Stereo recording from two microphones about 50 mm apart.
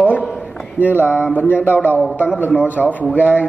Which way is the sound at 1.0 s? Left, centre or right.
Right.